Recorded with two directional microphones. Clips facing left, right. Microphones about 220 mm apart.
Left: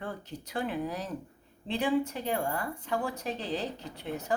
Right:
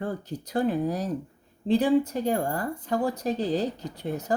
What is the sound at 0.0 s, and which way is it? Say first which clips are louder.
Speech: right 7 dB; 40° right (ahead or behind).